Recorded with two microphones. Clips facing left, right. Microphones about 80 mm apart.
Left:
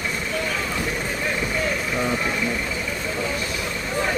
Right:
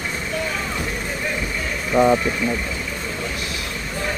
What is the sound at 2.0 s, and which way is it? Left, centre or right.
Speech, right.